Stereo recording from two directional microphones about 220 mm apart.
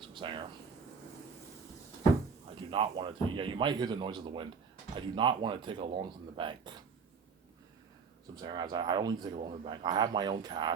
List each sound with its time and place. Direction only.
0.1 s a sound: 20° right (ahead or behind)
2.6 s a man's voice: 25° right (ahead or behind)
8.4 s a man's voice: 20° right (ahead or behind)